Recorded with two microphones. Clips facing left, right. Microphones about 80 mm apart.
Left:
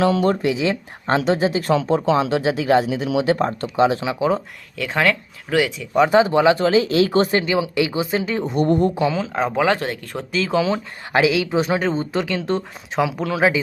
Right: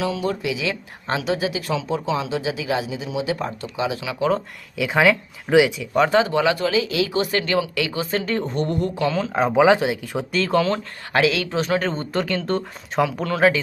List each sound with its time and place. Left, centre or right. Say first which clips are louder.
0.0 s speech: left 6 dB; left
3.1 s speech: left 5 dB; left
3.3 s speech: left 7 dB; left
4.8 s speech: right 2 dB; centre
6.1 s speech: left 6 dB; centre; by 7.3 s left
7.4 s speech: left 2 dB; centre
8.6 s a woman's voice: left 5 dB; left
9.0 s speech: even; centre
11.1 s speech: left 3 dB; centre
11.8 s speech: left 2 dB; centre